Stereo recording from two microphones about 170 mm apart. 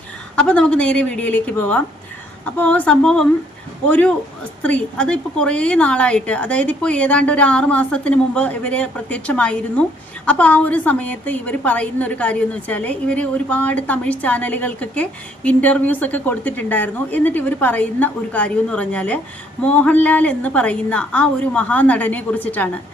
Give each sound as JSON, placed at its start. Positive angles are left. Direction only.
{"t": 0.3, "sound": "a woman's voice", "side_deg": 5}